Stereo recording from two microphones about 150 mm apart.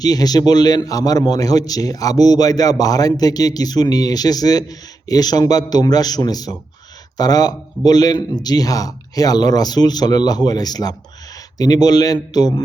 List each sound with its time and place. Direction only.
0.0 s a man's voice: 25° left (ahead or behind)